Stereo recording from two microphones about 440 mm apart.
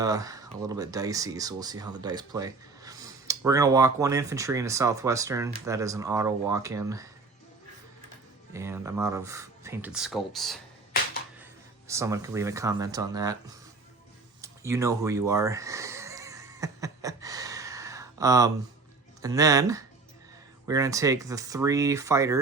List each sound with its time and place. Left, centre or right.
0.0 s speech: centre
8.5 s speech: centre
11.9 s speech: centre
14.4 s a sound: centre
19.2 s speech: centre